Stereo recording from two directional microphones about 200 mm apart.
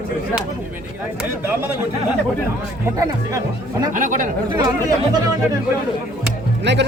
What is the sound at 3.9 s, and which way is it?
Speech, 40° right (ahead or behind).